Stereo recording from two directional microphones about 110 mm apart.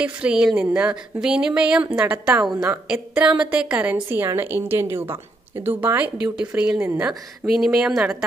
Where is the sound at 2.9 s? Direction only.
5° right (ahead or behind).